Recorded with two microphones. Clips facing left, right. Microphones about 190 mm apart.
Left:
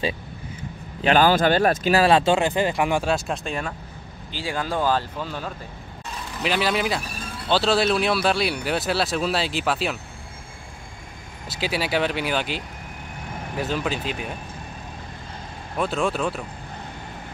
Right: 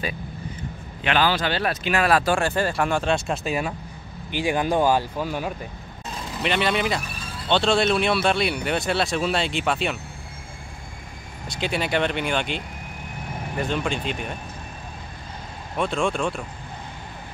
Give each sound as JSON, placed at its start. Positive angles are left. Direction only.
{"t": 1.0, "sound": "speech", "side_deg": 45}
{"t": 3.1, "sound": "speech", "side_deg": -5}
{"t": 4.3, "sound": "speech", "side_deg": -15}
{"t": 6.4, "sound": "speech", "side_deg": 0}
{"t": 11.4, "sound": "speech", "side_deg": 5}
{"t": 15.8, "sound": "speech", "side_deg": 0}